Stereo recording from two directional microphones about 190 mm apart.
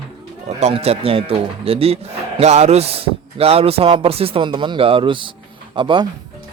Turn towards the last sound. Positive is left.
turn(degrees=-25)  # may be behind; listen again after turning